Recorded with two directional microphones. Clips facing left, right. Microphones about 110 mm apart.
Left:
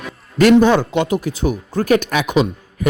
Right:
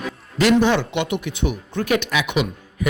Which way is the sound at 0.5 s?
45° left (ahead or behind).